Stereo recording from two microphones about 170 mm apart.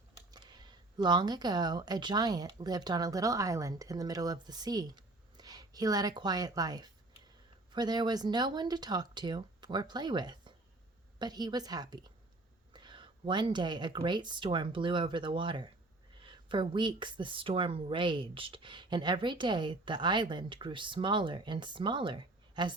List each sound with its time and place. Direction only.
0.3 s a woman's voice: 25° right (ahead or behind)